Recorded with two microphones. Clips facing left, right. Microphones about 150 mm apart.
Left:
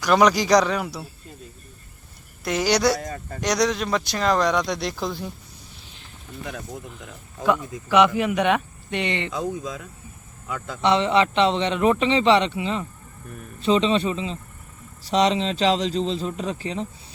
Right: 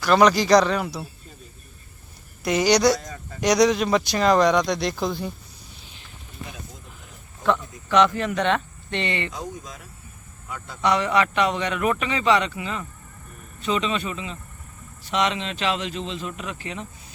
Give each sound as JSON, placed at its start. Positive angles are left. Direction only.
{"t": 0.0, "sound": "speech", "side_deg": 10}
{"t": 2.4, "sound": "speech", "side_deg": 0}
{"t": 3.0, "sound": "speech", "side_deg": 55}
{"t": 3.4, "sound": "speech", "side_deg": 0}
{"t": 7.4, "sound": "speech", "side_deg": 10}
{"t": 10.8, "sound": "a man's voice", "side_deg": 25}